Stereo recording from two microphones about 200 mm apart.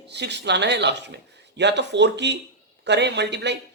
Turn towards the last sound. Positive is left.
turn(degrees=-60)  # may be behind; listen again after turning